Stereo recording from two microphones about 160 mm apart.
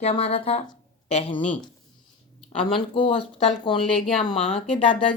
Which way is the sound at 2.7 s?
35° left (ahead or behind).